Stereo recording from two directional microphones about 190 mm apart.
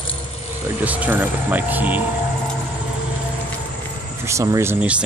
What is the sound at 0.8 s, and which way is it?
Speech, 10° right (ahead or behind).